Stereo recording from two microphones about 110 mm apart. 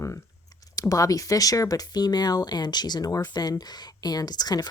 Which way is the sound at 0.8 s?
30° left (ahead or behind).